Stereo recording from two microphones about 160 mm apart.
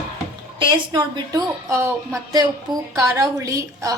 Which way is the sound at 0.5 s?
25° right (ahead or behind).